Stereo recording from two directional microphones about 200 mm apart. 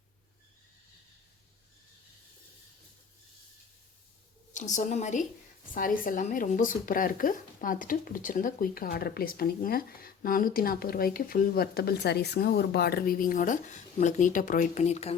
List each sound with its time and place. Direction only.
4.7 s speech: 40° left (ahead or behind)